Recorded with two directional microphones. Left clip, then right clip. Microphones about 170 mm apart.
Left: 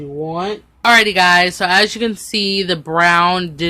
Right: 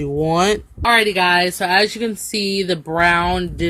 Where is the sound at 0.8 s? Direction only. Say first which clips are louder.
Left 4 dB; centre (ahead or behind).